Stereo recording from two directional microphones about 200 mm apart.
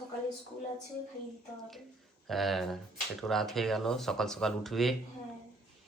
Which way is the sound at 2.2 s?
Centre (ahead or behind).